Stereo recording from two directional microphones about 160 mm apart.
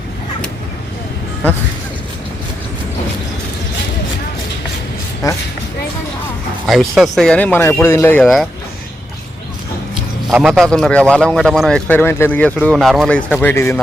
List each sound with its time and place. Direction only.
5.2 s speech: 20° left (ahead or behind)
6.7 s speech: centre (ahead or behind); by 8.2 s 15° left (ahead or behind)
8.2 s speech: centre (ahead or behind)
10.2 s speech: centre (ahead or behind)
12.7 s speech: centre (ahead or behind); by 13.7 s 15° left (ahead or behind)